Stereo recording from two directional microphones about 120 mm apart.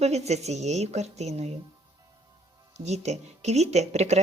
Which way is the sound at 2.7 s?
70° right (ahead or behind).